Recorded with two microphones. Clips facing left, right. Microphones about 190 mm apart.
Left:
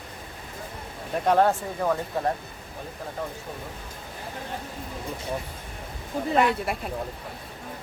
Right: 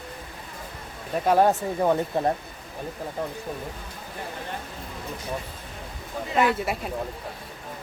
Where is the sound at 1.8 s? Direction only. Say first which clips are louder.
Right 3 dB; 25° right (ahead or behind).